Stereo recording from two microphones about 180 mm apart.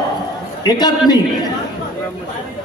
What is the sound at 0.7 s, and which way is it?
Speech, 20° left (ahead or behind).